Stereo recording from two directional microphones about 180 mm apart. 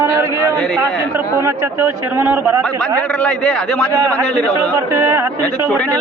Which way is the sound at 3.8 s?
15° right (ahead or behind).